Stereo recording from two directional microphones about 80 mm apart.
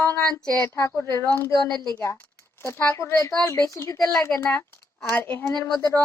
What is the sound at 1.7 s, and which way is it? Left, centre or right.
Speech, right.